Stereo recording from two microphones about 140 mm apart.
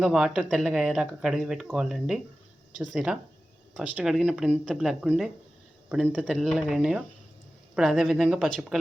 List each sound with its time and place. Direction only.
0.0 s speech: centre (ahead or behind)